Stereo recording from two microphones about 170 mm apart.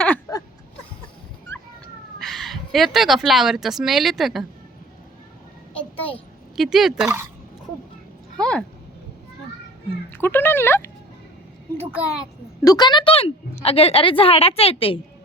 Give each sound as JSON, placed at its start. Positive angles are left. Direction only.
{"t": 2.1, "sound": "speech", "side_deg": 0}
{"t": 5.7, "sound": "a sound", "side_deg": 10}
{"t": 6.6, "sound": "speech", "side_deg": 0}
{"t": 8.4, "sound": "a sound", "side_deg": 5}
{"t": 10.1, "sound": "speech", "side_deg": 15}
{"t": 11.8, "sound": "a child's voice", "side_deg": -10}
{"t": 12.6, "sound": "a woman's voice", "side_deg": 25}